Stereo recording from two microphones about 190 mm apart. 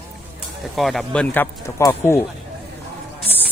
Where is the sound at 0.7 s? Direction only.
Centre (ahead or behind).